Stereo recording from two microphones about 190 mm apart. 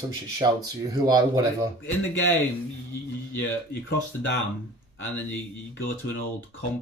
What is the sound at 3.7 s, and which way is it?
Speech, 65° left (ahead or behind).